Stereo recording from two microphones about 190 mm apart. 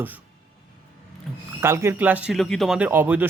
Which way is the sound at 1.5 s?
15° right (ahead or behind).